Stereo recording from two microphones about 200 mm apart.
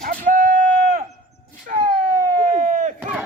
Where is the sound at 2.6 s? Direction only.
40° right (ahead or behind).